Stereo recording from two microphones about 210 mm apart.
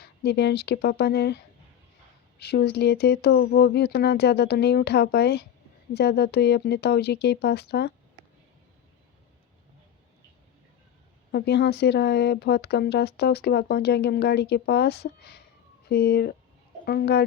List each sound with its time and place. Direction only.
0.0 s speech: 50° left (ahead or behind)
2.4 s speech: 50° left (ahead or behind)
11.3 s speech: 50° left (ahead or behind)